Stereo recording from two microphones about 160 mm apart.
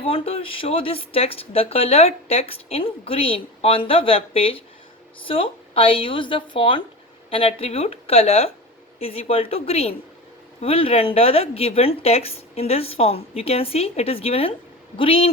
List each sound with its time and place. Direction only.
0.0 s speech: 35° left (ahead or behind)